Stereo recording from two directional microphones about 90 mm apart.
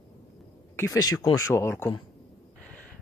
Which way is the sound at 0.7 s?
30° left (ahead or behind).